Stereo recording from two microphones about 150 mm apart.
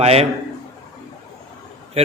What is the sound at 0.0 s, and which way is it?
Speech, 45° right (ahead or behind).